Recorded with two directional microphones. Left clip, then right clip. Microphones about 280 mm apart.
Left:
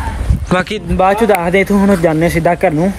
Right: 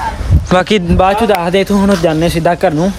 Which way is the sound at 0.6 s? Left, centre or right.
Centre.